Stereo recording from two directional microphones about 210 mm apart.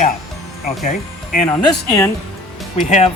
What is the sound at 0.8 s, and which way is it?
Speech, 35° left (ahead or behind).